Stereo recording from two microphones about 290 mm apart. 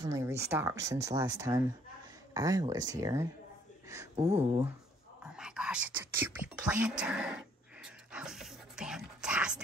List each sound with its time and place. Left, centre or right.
0.0 s speech: centre
5.2 s speech: centre
6.8 s a sound: centre